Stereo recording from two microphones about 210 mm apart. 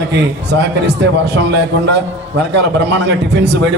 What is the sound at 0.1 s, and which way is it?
A man's voice, 55° right (ahead or behind).